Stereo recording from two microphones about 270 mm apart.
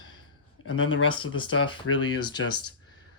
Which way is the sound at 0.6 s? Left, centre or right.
Left.